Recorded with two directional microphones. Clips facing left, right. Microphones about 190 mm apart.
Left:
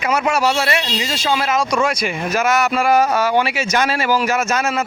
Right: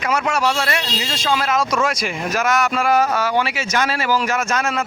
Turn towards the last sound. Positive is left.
turn(degrees=10)  # may be behind; listen again after turning